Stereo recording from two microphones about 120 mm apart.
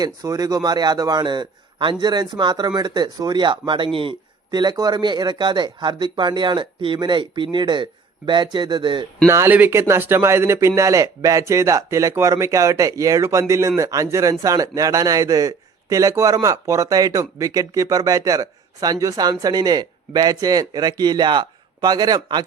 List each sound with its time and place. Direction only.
0.0 s speech: 35° right (ahead or behind)
9.2 s speech: 20° right (ahead or behind)